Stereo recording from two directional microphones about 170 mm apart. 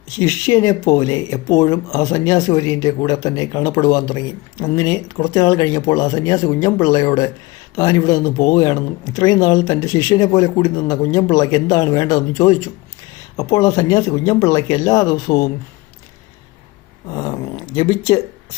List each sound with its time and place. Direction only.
0.2 s speech: 20° left (ahead or behind)
17.2 s speech: 20° left (ahead or behind)